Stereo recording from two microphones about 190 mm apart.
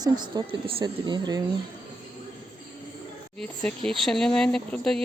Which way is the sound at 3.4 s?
5° left (ahead or behind).